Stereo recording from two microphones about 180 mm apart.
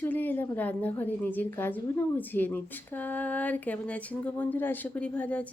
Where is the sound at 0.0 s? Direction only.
10° left (ahead or behind).